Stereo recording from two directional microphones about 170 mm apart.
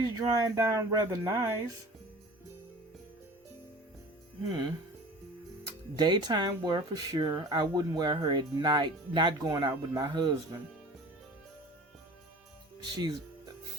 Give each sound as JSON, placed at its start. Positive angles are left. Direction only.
{"t": 0.0, "sound": "speech", "side_deg": -20}
{"t": 6.0, "sound": "speech", "side_deg": -25}
{"t": 12.8, "sound": "speech", "side_deg": -25}